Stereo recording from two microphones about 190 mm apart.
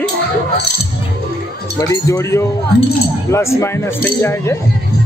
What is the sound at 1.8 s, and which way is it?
Speech, 15° left (ahead or behind).